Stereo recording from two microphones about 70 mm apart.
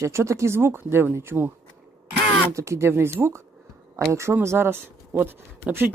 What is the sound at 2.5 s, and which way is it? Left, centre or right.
Speech, right.